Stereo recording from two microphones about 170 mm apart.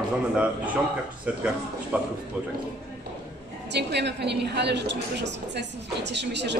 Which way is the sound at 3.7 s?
85° right.